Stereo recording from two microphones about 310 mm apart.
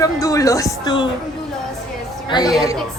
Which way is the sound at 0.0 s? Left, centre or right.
Centre.